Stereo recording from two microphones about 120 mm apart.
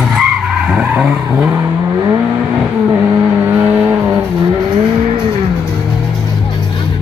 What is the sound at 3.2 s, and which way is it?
Vehicle, 20° right (ahead or behind).